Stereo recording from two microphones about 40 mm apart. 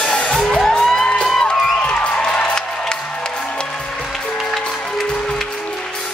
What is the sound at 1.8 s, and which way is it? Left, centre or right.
Music, left.